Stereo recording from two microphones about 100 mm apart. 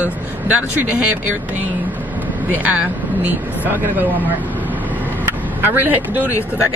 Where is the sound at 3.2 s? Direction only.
15° right (ahead or behind).